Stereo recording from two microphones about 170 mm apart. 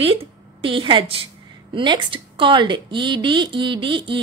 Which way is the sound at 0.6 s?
30° right (ahead or behind).